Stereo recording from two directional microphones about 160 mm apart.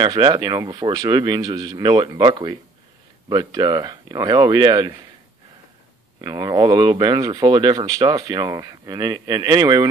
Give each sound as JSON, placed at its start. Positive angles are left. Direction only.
{"t": 0.0, "sound": "speech", "side_deg": -25}
{"t": 6.2, "sound": "speech", "side_deg": -25}